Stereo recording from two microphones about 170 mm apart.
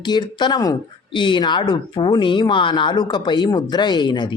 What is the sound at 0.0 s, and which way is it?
A man's voice, 25° left (ahead or behind).